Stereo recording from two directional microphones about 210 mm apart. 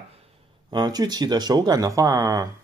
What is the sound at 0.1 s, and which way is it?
Speech, 25° right (ahead or behind).